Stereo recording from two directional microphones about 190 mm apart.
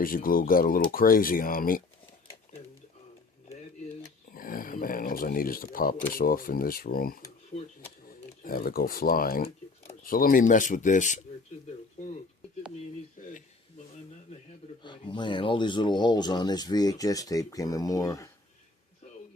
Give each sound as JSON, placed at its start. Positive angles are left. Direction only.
{"t": 0.0, "sound": "speech", "side_deg": 50}
{"t": 4.3, "sound": "speech", "side_deg": 50}
{"t": 8.4, "sound": "speech", "side_deg": 50}
{"t": 13.2, "sound": "a sound", "side_deg": 45}
{"t": 14.8, "sound": "speech", "side_deg": 25}